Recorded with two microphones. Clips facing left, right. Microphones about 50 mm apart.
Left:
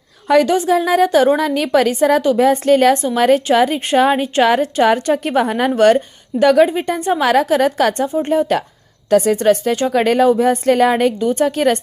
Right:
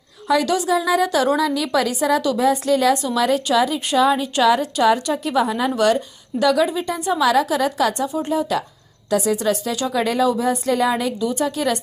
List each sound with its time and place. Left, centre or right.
0.4 s a woman's voice: left
8.0 s a woman's voice: left
9.9 s a woman's voice: left
11.2 s speech: left